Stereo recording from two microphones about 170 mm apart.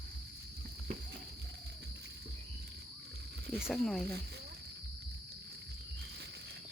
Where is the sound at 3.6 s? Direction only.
Centre (ahead or behind).